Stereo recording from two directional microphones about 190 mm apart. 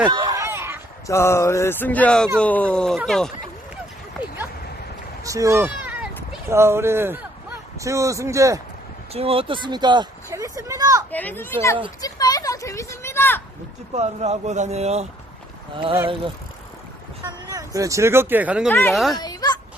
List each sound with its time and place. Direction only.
0.1 s a sound: 20° right (ahead or behind)
1.0 s speech: 15° left (ahead or behind)
4.2 s a sound: 10° right (ahead or behind)
6.5 s speech: 15° right (ahead or behind)
9.1 s speech: 30° right (ahead or behind)
11.1 s speech: 10° left (ahead or behind)
13.9 s speech: 35° right (ahead or behind)
17.2 s a sound: 20° right (ahead or behind)
17.7 s speech: 15° right (ahead or behind)
18.7 s speech: 10° left (ahead or behind)
18.9 s speech: centre (ahead or behind)
19.2 s fowl: 20° left (ahead or behind)